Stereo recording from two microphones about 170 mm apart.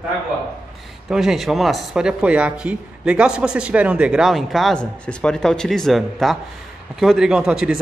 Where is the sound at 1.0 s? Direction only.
Centre (ahead or behind).